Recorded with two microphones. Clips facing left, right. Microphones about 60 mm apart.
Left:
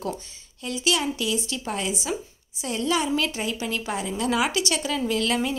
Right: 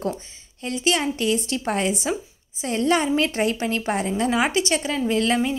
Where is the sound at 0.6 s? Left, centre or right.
Right.